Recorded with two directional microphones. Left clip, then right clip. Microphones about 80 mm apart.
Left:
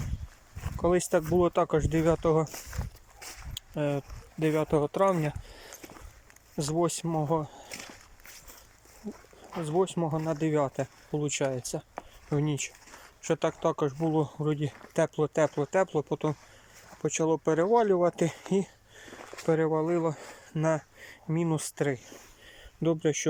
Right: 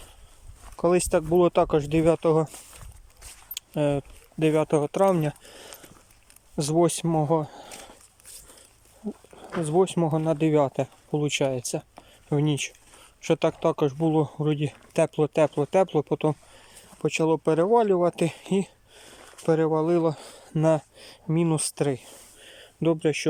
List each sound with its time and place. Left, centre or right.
0.8 s speech: right
1.3 s speech: right; by 2.6 s centre
3.8 s speech: right
9.4 s speech: right
22.4 s a sound: centre